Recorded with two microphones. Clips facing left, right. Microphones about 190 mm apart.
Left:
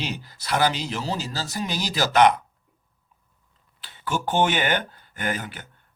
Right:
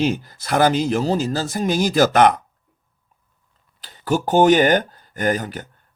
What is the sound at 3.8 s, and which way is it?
Speech, 40° right (ahead or behind).